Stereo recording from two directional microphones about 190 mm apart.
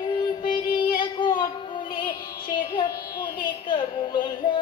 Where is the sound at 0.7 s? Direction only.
25° left (ahead or behind).